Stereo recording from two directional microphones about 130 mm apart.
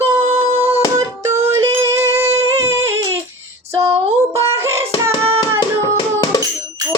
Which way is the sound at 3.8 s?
50° right (ahead or behind).